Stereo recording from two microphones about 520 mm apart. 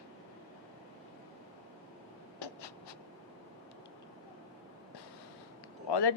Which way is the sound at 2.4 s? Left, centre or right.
Left.